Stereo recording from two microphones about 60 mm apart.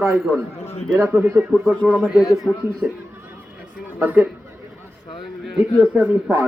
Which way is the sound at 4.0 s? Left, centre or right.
Right.